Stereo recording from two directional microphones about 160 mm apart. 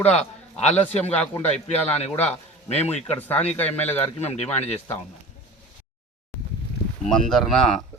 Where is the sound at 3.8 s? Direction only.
40° left (ahead or behind).